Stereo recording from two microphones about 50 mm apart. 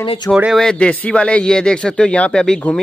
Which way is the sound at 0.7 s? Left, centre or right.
Left.